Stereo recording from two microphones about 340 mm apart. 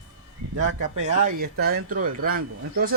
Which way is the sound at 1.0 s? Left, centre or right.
Right.